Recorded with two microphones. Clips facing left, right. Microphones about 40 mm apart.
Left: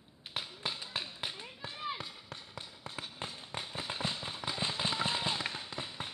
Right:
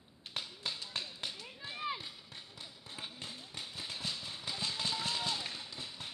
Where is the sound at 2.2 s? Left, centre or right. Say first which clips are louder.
Left 4 dB; left.